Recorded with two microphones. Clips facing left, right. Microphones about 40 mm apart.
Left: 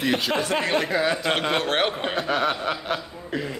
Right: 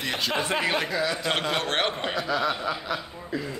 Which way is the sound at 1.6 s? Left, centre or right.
Centre.